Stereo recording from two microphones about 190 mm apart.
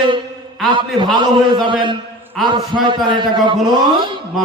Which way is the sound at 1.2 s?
25° right (ahead or behind).